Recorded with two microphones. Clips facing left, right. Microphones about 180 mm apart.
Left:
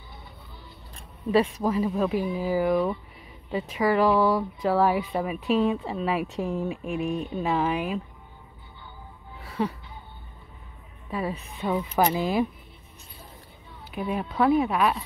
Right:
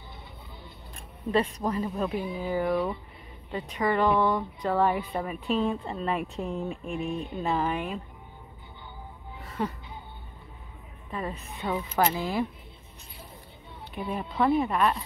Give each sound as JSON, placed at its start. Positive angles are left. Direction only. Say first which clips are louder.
{"t": 1.3, "sound": "speech", "louder": "left 4 dB", "side_deg": 5}
{"t": 11.1, "sound": "speech", "louder": "left 4 dB", "side_deg": 10}
{"t": 13.9, "sound": "speech", "louder": "left 3 dB", "side_deg": 5}